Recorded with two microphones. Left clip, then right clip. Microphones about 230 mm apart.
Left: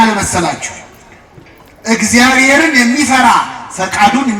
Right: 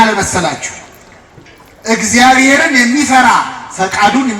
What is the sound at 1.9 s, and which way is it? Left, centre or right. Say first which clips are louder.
A man's voice: right 2 dB; left.